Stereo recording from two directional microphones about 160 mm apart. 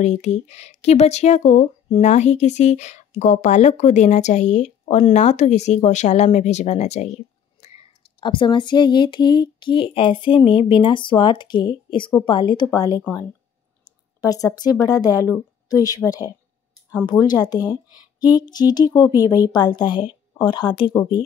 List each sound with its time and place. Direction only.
0.0 s speech: 45° left (ahead or behind)
8.2 s speech: 30° left (ahead or behind)